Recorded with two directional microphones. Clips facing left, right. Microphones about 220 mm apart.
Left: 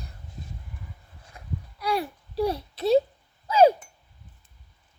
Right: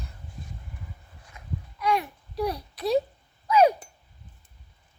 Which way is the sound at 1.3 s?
35° left (ahead or behind).